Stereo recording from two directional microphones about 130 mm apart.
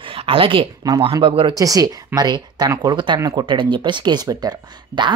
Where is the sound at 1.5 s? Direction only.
25° right (ahead or behind).